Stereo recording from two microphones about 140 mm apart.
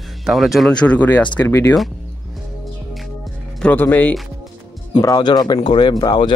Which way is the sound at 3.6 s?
15° left (ahead or behind).